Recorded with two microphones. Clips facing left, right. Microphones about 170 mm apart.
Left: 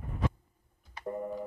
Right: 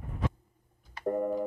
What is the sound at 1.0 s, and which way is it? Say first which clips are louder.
Busy signal: right 7 dB; 50° right (ahead or behind).